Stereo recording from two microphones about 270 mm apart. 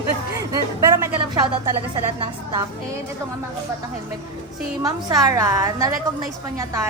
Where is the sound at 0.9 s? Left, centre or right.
Centre.